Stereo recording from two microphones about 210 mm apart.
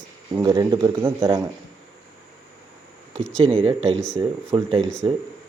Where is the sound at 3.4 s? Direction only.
25° right (ahead or behind).